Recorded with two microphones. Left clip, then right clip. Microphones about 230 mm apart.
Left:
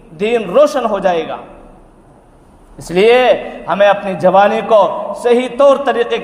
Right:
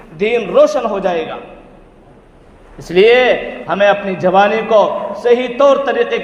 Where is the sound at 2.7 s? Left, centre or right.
Left.